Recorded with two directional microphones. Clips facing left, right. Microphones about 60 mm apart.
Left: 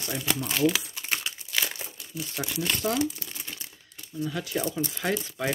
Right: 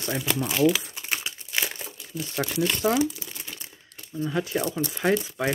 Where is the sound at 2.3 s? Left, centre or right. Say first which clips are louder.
Right 6 dB; right.